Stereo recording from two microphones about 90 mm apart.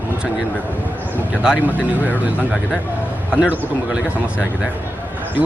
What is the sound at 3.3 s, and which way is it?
Speech, 15° right (ahead or behind).